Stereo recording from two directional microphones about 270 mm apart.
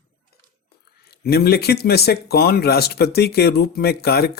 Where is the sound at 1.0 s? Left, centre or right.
Left.